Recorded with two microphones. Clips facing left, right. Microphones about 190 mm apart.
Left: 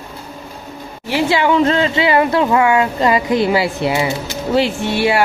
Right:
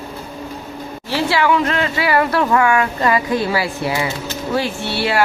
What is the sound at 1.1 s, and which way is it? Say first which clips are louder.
Speech: left 2 dB; 15° left (ahead or behind).